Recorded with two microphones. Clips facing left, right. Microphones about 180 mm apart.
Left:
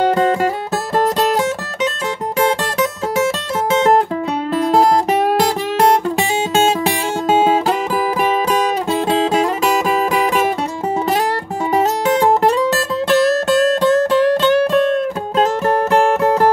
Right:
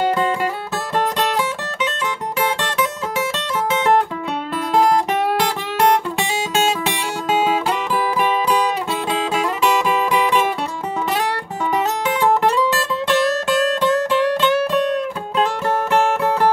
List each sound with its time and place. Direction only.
0.1 s music: 40° left (ahead or behind)
5.4 s music: 40° left (ahead or behind)
11.7 s music: 40° left (ahead or behind)